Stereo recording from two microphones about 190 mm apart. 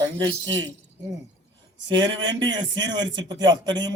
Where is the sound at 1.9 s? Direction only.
25° right (ahead or behind).